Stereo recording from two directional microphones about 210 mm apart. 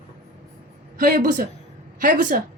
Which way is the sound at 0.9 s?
40° right (ahead or behind).